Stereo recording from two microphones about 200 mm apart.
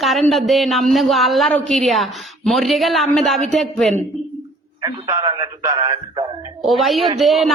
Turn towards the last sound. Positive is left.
turn(degrees=0)  # may be behind; listen again after turning